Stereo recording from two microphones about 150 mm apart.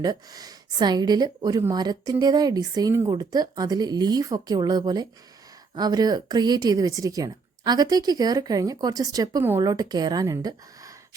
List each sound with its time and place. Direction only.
0.0 s a woman's voice: 25° right (ahead or behind)